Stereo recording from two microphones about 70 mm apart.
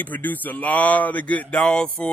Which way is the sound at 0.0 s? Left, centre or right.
Left.